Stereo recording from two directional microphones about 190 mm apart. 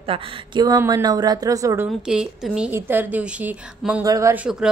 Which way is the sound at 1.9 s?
Centre (ahead or behind).